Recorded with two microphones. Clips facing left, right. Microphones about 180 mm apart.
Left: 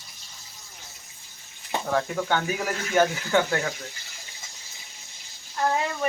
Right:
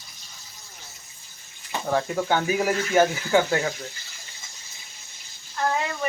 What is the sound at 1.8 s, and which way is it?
Speech, 15° right (ahead or behind).